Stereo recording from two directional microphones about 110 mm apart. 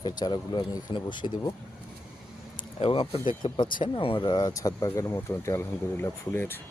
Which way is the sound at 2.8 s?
55° left (ahead or behind).